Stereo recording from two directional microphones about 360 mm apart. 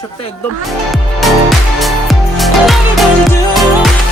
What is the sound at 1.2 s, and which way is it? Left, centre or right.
Music, centre.